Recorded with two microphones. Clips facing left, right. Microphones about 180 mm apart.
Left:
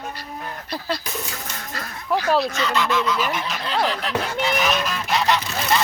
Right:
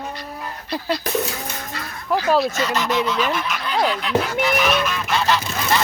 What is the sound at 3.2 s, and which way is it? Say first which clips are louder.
Speech: right 3 dB; 15° left (ahead or behind).